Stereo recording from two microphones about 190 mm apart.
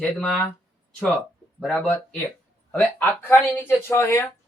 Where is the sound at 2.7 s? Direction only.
10° left (ahead or behind).